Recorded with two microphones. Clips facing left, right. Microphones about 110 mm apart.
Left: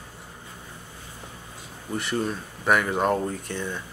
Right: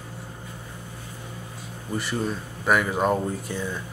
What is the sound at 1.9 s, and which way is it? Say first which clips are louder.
Speech: even; centre (ahead or behind).